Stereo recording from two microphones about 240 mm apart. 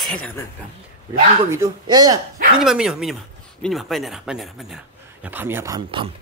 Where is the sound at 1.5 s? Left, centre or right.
Centre.